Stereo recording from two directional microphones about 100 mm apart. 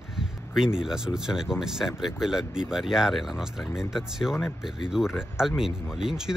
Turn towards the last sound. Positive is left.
turn(degrees=-5)  # may be behind; listen again after turning